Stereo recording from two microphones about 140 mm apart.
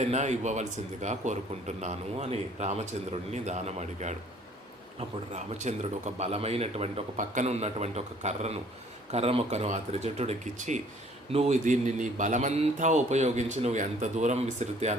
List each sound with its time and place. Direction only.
0.1 s speech: 55° right (ahead or behind)
11.3 s speech: 50° right (ahead or behind)